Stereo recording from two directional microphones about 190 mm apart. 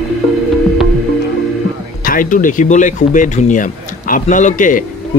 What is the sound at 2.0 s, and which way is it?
Speech, 45° left (ahead or behind).